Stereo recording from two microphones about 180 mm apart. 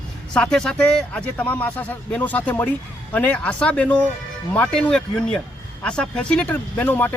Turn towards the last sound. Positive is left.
turn(degrees=10)  # may be behind; listen again after turning